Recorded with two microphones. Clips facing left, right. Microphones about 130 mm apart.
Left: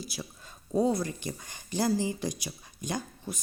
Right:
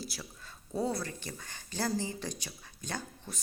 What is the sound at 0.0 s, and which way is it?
A woman's voice, 15° left (ahead or behind).